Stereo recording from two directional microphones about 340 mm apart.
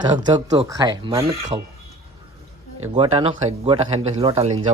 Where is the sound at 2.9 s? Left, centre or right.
Centre.